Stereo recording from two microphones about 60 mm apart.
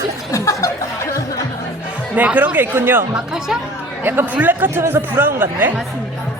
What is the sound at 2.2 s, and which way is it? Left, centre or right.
Speech, right.